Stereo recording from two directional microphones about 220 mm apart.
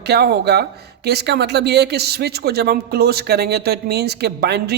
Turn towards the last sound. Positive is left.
turn(degrees=-50)  # may be behind; listen again after turning